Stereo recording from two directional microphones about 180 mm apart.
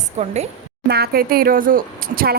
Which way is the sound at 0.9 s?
60° right (ahead or behind).